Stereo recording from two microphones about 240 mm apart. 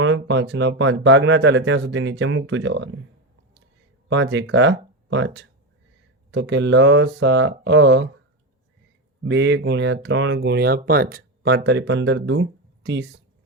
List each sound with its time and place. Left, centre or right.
0.0 s speech: right
4.1 s speech: right
9.2 s speech: right